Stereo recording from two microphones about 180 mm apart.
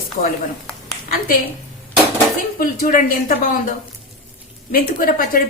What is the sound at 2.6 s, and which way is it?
Speech, 50° left (ahead or behind).